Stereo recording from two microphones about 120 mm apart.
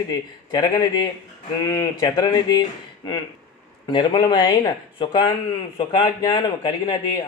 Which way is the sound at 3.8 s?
40° left (ahead or behind).